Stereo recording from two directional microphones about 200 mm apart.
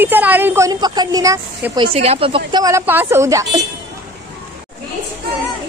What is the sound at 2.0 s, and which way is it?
A woman's voice, 30° right (ahead or behind).